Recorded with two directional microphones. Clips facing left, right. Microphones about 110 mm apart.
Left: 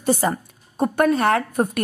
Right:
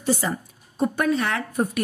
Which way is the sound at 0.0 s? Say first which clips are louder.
Left 4 dB; 50° left (ahead or behind).